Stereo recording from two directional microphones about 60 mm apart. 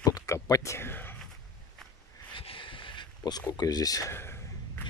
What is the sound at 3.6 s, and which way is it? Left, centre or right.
Speech, left.